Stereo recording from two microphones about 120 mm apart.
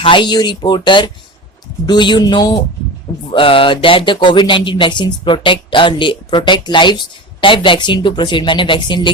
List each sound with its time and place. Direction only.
0.0 s speech: 40° left (ahead or behind)
3.2 s a sound: 50° left (ahead or behind)
7.4 s speech: 45° left (ahead or behind)